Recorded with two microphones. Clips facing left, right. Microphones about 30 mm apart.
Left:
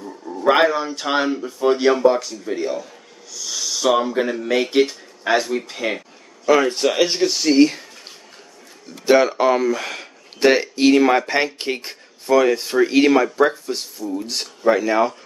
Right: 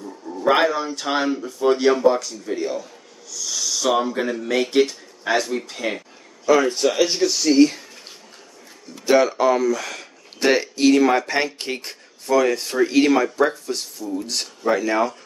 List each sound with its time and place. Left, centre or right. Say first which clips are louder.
0.0 s speech: left 3 dB; centre
6.4 s speech: left 1 dB; left
9.0 s speech: left 2 dB; centre
10.4 s speech: left 2 dB; centre